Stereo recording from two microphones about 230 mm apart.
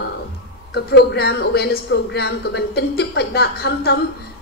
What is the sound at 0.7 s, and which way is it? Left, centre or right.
Speech, left.